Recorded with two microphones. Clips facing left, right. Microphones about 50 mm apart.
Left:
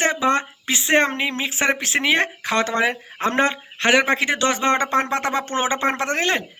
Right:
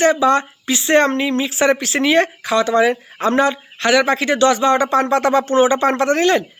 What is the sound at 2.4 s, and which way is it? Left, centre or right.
Speech, left.